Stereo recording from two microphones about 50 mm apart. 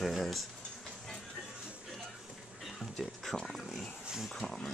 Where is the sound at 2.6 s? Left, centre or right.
Centre.